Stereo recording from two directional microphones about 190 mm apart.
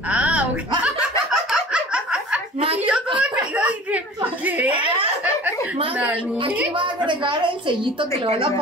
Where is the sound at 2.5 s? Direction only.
30° right (ahead or behind).